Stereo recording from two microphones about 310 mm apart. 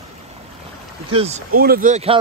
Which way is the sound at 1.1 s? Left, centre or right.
Centre.